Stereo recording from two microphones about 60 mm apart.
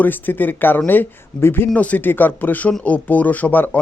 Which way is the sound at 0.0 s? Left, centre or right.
Left.